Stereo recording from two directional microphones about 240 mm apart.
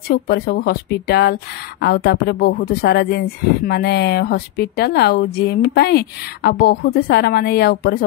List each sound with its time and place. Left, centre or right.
0.1 s speech: left